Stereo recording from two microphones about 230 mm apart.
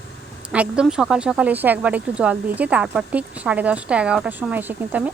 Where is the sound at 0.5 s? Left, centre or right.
Centre.